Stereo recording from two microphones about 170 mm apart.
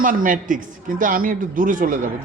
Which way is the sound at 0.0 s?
55° right (ahead or behind).